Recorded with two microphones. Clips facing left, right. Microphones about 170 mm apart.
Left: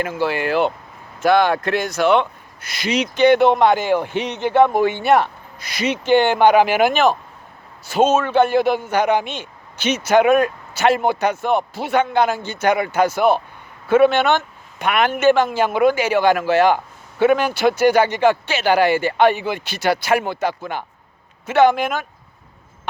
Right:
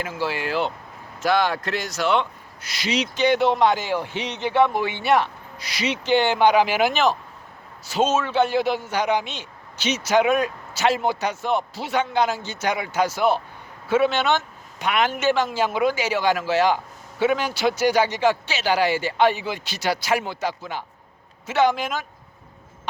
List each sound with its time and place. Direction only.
0.0 s a man's voice: 55° left (ahead or behind)